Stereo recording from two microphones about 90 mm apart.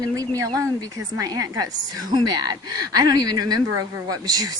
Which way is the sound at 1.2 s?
45° right (ahead or behind).